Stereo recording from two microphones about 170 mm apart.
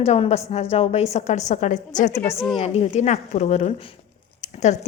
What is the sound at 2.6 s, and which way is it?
Speech, 40° left (ahead or behind).